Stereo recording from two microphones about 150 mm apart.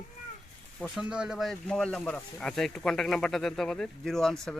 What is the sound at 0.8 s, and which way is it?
Speech, centre (ahead or behind).